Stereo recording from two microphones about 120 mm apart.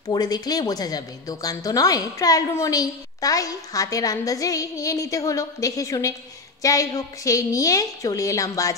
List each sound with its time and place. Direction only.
0.1 s a woman's voice: 35° left (ahead or behind)